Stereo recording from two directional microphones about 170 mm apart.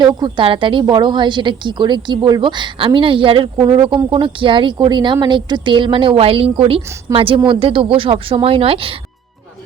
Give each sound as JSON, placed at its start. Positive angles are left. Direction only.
{"t": 0.0, "sound": "a woman's voice", "side_deg": -25}